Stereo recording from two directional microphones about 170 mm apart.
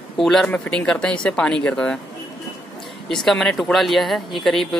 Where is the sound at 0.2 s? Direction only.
5° left (ahead or behind).